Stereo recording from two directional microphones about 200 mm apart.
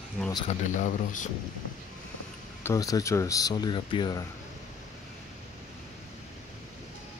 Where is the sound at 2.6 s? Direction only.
15° left (ahead or behind).